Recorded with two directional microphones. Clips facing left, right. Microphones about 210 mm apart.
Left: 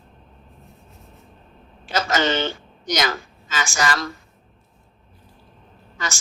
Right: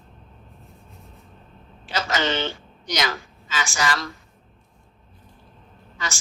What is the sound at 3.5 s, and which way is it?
Speech, 45° left (ahead or behind).